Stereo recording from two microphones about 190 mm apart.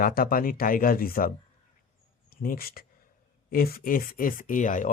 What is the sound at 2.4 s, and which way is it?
Speech, 50° left (ahead or behind).